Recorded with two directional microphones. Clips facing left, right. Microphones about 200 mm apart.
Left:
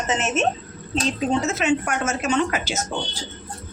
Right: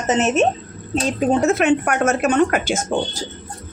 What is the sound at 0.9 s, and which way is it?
A woman's voice, 50° right (ahead or behind).